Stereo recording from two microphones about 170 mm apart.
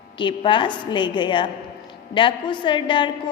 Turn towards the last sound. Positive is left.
turn(degrees=30)  # may be behind; listen again after turning